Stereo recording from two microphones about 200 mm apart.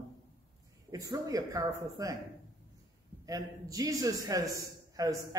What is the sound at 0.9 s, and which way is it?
A man's voice, 15° right (ahead or behind).